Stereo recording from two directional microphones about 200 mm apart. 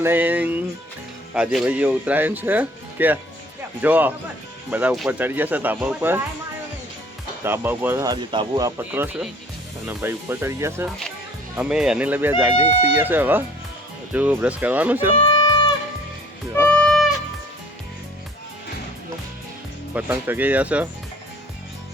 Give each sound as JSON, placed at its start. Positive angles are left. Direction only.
{"t": 0.0, "sound": "speech", "side_deg": -10}
{"t": 7.4, "sound": "speech", "side_deg": -10}
{"t": 8.8, "sound": "speech", "side_deg": -5}
{"t": 15.1, "sound": "music", "side_deg": 25}
{"t": 16.6, "sound": "music", "side_deg": 5}
{"t": 19.9, "sound": "speech", "side_deg": -10}